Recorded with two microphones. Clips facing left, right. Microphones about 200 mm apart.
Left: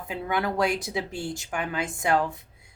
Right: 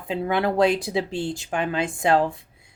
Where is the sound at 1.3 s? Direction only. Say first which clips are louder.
Right 4 dB; 30° right (ahead or behind).